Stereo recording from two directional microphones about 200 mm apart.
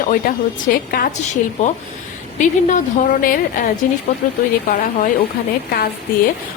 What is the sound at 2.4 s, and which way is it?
A woman's voice, 40° left (ahead or behind).